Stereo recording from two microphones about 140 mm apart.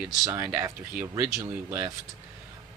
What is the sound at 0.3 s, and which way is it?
Speech, 15° right (ahead or behind).